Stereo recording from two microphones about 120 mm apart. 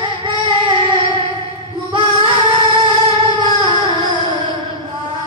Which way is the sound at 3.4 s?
45° right (ahead or behind).